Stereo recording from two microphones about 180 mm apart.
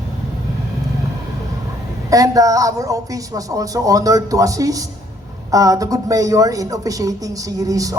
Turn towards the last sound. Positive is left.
turn(degrees=-20)  # may be behind; listen again after turning